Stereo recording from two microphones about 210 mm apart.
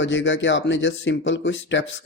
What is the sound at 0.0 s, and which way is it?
Speech, 60° left (ahead or behind).